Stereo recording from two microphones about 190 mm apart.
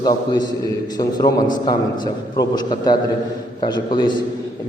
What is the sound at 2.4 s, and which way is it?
A man's voice, 20° left (ahead or behind).